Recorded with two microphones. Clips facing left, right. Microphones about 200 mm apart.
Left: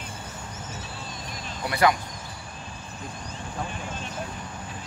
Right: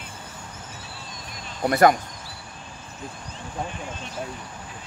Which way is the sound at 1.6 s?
45° right (ahead or behind).